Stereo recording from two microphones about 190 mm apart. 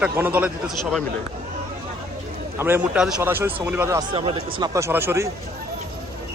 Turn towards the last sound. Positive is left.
turn(degrees=-15)  # may be behind; listen again after turning